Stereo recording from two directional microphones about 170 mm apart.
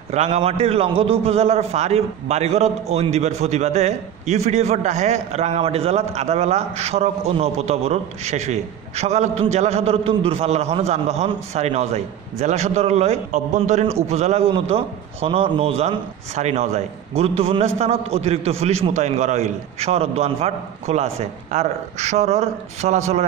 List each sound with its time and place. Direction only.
0.1 s a man's voice: 40° right (ahead or behind)